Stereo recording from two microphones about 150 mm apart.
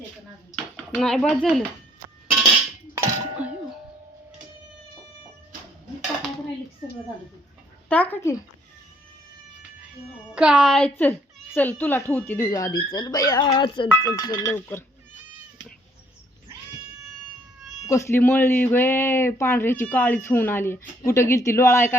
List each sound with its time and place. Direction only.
0.5 s a child's voice: 5° left (ahead or behind)
2.9 s a sound: 10° right (ahead or behind)
7.9 s speech: 10° left (ahead or behind)
10.3 s speech: 5° right (ahead or behind); by 14.8 s 15° left (ahead or behind)
17.8 s speech: 20° left (ahead or behind)